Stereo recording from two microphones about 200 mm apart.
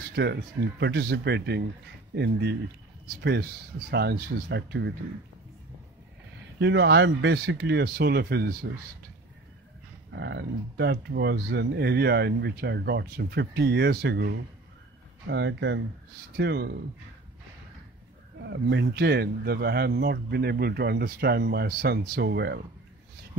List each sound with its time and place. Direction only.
0.1 s speech: 55° right (ahead or behind)
6.6 s speech: 60° right (ahead or behind)
10.1 s speech: 60° right (ahead or behind)
18.4 s speech: 60° right (ahead or behind)